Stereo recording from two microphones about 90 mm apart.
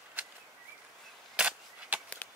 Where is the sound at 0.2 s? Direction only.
20° right (ahead or behind).